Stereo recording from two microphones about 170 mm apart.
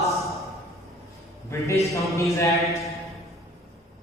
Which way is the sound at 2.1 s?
20° left (ahead or behind).